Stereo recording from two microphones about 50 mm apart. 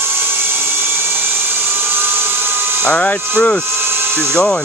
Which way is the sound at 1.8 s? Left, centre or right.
Right.